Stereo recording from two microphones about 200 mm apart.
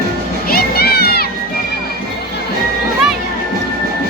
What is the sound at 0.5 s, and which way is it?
Crowd, 50° left (ahead or behind).